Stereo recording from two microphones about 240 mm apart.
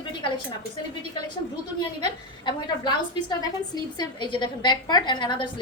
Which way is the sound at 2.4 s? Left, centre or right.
Centre.